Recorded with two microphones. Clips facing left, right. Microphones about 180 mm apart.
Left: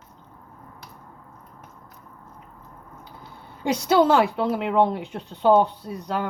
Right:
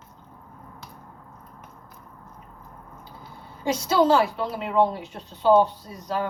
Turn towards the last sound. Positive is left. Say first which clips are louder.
# left 2 dB
turn(degrees=60)  # may be behind; listen again after turning